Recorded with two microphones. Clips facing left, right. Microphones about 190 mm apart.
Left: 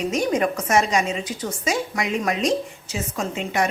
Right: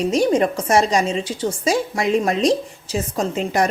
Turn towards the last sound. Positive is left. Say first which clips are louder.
# right 4 dB
turn(degrees=-35)  # may be behind; listen again after turning